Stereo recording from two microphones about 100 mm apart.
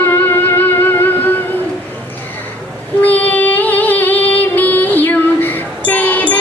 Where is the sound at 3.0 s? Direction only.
20° left (ahead or behind).